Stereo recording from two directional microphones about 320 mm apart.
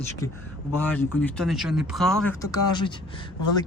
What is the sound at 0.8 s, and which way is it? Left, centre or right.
Speech, centre.